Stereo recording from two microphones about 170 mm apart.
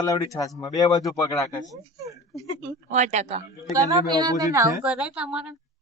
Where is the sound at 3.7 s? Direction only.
20° right (ahead or behind).